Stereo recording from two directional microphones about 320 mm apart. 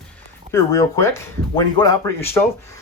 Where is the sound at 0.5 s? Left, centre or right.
Centre.